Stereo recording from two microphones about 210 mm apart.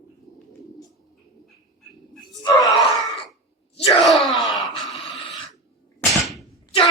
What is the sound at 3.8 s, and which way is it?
Groan, 30° left (ahead or behind).